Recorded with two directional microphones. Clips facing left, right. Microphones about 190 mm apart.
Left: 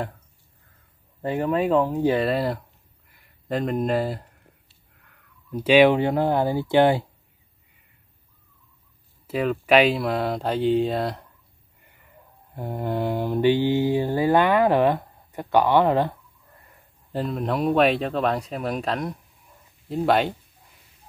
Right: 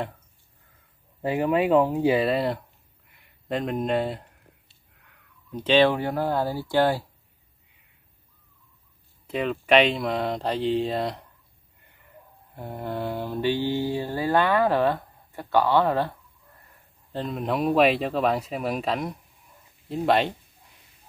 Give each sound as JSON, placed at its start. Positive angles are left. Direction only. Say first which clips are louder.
{"t": 1.2, "sound": "speech", "louder": "even", "side_deg": -5}
{"t": 9.3, "sound": "speech", "louder": "left 2 dB", "side_deg": 5}
{"t": 12.5, "sound": "speech", "louder": "left 4 dB", "side_deg": 15}
{"t": 17.1, "sound": "speech", "louder": "left 2 dB", "side_deg": 5}